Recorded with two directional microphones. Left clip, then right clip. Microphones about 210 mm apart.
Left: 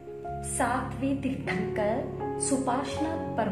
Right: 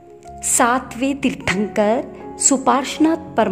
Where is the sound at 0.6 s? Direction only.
55° right (ahead or behind).